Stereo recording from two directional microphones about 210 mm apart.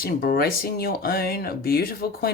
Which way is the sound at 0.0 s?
45° left (ahead or behind).